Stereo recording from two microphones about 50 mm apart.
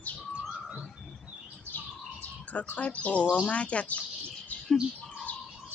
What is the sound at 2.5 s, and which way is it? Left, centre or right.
Speech, left.